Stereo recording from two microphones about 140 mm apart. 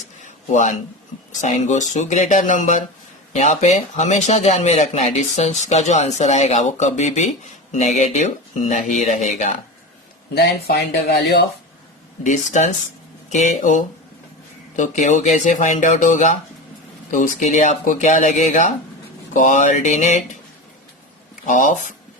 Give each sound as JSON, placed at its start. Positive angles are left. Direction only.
{"t": 0.3, "sound": "a sound", "side_deg": 60}
{"t": 1.4, "sound": "speech", "side_deg": 60}
{"t": 3.3, "sound": "speech", "side_deg": 55}
{"t": 8.7, "sound": "speech", "side_deg": 65}
{"t": 12.2, "sound": "speech", "side_deg": 55}
{"t": 21.4, "sound": "speech", "side_deg": 65}